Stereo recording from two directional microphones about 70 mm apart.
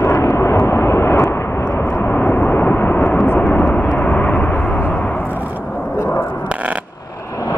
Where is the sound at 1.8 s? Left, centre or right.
Centre.